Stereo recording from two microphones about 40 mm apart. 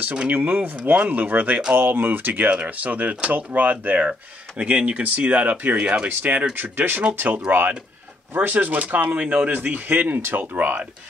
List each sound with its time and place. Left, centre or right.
0.3 s speech: right
1.8 s speech: right
2.5 s speech: right
8.4 s speech: right